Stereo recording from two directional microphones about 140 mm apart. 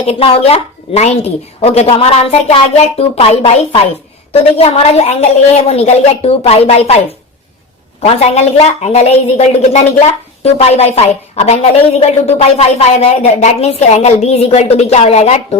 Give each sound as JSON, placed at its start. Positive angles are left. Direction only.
{"t": 0.0, "sound": "a woman's voice", "side_deg": 45}
{"t": 8.0, "sound": "a woman's voice", "side_deg": 50}